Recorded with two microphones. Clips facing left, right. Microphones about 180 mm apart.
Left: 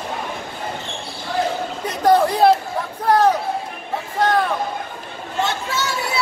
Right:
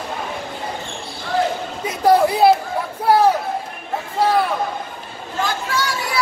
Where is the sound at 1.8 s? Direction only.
5° right (ahead or behind).